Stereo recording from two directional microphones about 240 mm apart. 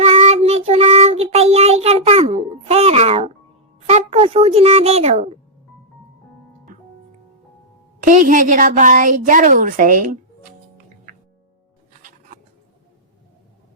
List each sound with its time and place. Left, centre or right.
0.0 s child singing: right
3.8 s speech: right
8.0 s a woman's voice: right